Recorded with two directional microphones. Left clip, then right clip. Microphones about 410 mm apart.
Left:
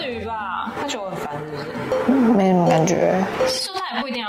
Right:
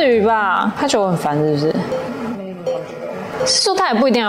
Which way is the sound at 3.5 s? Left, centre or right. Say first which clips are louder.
Right 10 dB; right.